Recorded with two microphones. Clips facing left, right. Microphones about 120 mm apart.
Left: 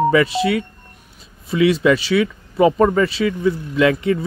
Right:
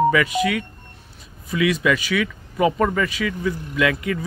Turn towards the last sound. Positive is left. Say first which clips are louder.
# left 5 dB
turn(degrees=30)  # may be behind; listen again after turning